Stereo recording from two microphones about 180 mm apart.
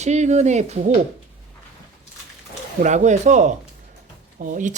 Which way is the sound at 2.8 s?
40° right (ahead or behind).